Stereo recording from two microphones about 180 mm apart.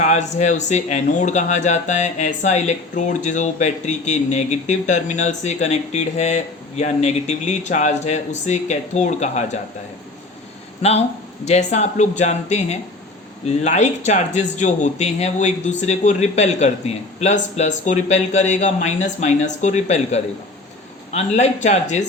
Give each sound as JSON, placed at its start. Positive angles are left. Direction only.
{"t": 0.0, "sound": "speech", "side_deg": 40}
{"t": 11.4, "sound": "speech", "side_deg": 40}